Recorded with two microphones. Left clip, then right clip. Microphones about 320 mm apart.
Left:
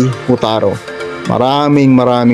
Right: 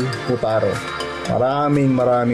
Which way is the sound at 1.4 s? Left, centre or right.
Left.